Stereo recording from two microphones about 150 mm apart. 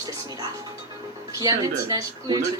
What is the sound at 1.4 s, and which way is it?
Speech, 25° right (ahead or behind).